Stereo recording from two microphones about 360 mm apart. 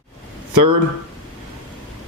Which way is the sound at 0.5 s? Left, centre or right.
Right.